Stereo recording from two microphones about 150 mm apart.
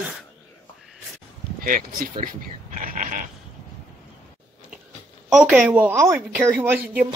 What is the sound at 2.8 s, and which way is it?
Goat, 65° right (ahead or behind).